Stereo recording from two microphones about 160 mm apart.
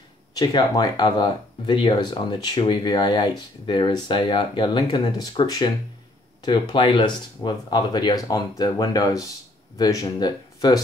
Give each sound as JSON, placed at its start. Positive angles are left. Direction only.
{"t": 0.4, "sound": "speech", "side_deg": 25}